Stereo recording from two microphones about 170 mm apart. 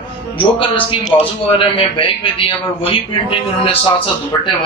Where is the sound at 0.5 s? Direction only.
30° left (ahead or behind).